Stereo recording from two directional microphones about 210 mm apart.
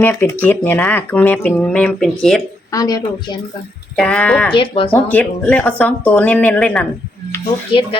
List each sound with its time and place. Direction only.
0.0 s speech: 10° left (ahead or behind)
2.7 s speech: 15° left (ahead or behind)
3.9 s speech: 5° left (ahead or behind)
4.5 s speech: 25° left (ahead or behind)
4.9 s speech: 10° left (ahead or behind)
7.7 s speech: 25° left (ahead or behind)